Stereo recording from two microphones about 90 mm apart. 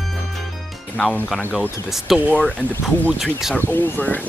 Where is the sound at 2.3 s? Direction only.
10° left (ahead or behind).